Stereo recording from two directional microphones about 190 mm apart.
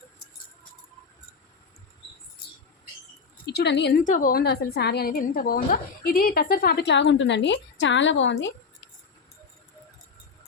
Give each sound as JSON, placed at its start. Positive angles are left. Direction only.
{"t": 3.4, "sound": "a woman's voice", "side_deg": 60}
{"t": 4.0, "sound": "a woman's voice", "side_deg": 45}